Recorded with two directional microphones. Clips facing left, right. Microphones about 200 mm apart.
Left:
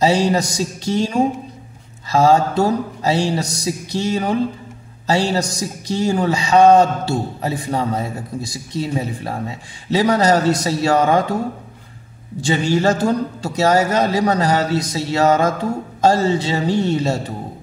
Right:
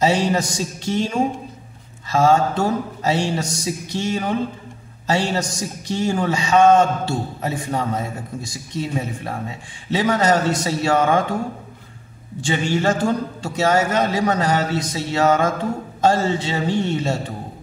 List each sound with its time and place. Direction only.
0.0 s a man's voice: 35° left (ahead or behind)
2.0 s a man's voice: 35° left (ahead or behind)
12.4 s a man's voice: 40° left (ahead or behind)